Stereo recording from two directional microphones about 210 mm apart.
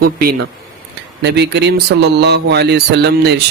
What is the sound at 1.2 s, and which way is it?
Speech, 55° right (ahead or behind).